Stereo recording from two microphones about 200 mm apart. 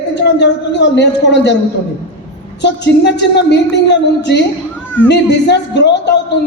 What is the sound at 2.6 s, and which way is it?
A woman's voice, 60° left (ahead or behind).